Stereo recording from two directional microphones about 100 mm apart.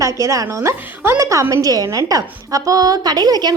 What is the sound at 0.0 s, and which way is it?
A woman's voice, 30° right (ahead or behind).